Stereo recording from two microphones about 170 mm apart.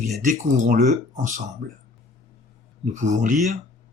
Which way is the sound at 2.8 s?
45° right (ahead or behind).